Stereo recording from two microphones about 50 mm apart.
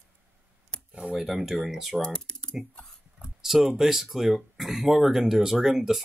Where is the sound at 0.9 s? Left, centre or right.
Right.